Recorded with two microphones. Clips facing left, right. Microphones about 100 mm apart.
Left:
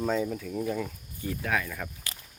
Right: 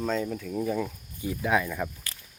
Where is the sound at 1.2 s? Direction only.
20° right (ahead or behind).